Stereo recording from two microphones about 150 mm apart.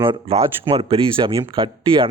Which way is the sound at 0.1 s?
40° right (ahead or behind).